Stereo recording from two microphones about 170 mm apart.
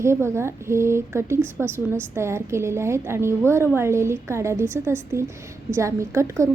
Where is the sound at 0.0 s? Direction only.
15° right (ahead or behind).